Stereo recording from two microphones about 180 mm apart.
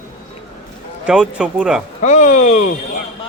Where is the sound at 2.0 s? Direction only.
40° left (ahead or behind).